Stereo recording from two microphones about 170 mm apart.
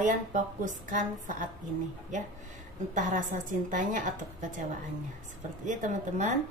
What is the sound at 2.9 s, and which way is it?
Speech, 45° right (ahead or behind).